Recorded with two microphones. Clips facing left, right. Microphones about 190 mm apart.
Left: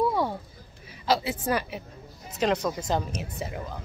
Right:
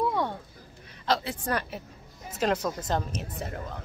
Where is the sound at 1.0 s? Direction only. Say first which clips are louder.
Left 3 dB; 5° left (ahead or behind).